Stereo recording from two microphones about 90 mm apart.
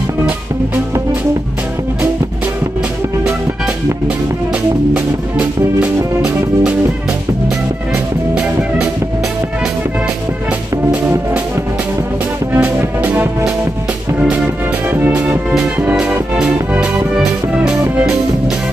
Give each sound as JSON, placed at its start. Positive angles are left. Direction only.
{"t": 4.9, "sound": "music", "side_deg": -15}
{"t": 8.4, "sound": "music", "side_deg": -15}
{"t": 12.5, "sound": "music", "side_deg": -15}
{"t": 14.9, "sound": "music", "side_deg": -20}
{"t": 15.2, "sound": "music", "side_deg": -5}